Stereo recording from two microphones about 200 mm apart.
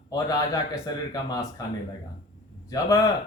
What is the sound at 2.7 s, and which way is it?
Speech, 15° left (ahead or behind).